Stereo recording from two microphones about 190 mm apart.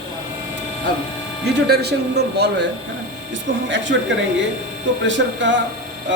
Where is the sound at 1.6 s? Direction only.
60° right (ahead or behind).